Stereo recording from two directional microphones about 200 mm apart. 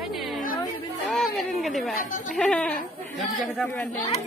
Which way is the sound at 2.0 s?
40° left (ahead or behind).